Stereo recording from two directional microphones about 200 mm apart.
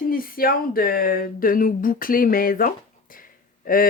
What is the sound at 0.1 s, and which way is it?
Speech, 45° left (ahead or behind).